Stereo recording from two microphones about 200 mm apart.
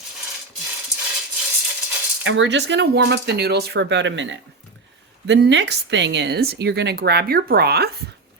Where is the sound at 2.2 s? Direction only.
65° right (ahead or behind).